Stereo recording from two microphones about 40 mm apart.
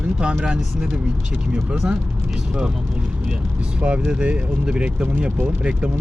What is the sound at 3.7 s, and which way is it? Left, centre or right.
Speech, right.